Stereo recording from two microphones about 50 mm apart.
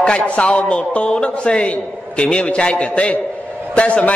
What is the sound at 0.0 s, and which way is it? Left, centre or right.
A man's voice, left.